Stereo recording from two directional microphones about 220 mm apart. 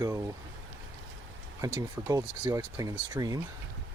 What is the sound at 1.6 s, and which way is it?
Mechanisms, 15° right (ahead or behind).